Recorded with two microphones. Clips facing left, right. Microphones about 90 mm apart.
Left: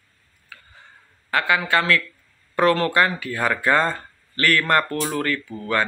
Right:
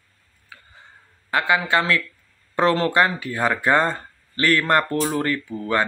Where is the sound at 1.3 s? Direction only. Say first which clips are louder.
Right 1 dB; 20° right (ahead or behind).